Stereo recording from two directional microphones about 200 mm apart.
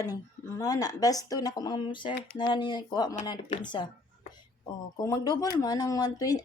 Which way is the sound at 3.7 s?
25° left (ahead or behind).